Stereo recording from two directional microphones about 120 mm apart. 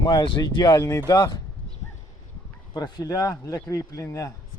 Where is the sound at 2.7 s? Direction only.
35° left (ahead or behind).